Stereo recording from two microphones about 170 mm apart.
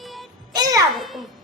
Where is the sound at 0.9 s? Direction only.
Centre (ahead or behind).